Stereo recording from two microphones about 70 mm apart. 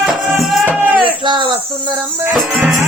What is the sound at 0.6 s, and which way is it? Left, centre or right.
Music, right.